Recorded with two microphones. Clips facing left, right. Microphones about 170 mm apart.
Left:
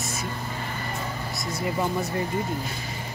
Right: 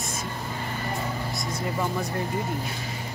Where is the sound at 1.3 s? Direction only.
5° left (ahead or behind).